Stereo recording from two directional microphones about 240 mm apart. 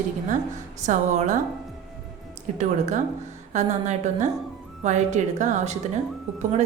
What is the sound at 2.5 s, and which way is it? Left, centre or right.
A woman's voice, right.